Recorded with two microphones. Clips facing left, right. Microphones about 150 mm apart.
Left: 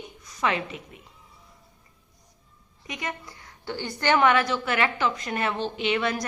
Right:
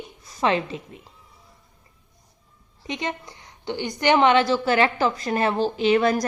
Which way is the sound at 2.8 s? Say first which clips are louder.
Right 5 dB; 25° right (ahead or behind).